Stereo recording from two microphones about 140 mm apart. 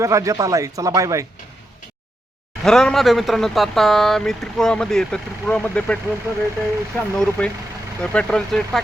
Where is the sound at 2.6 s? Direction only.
5° left (ahead or behind).